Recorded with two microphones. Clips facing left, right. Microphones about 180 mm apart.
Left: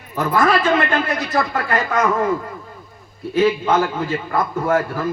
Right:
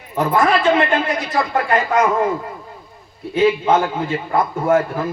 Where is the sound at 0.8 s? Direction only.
25° right (ahead or behind).